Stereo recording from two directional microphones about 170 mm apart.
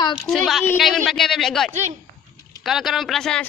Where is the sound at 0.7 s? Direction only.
Centre (ahead or behind).